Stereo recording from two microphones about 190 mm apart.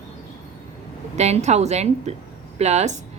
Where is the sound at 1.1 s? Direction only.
35° right (ahead or behind).